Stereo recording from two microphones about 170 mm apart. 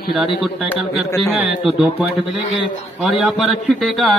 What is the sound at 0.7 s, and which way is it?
A man's voice, 5° right (ahead or behind).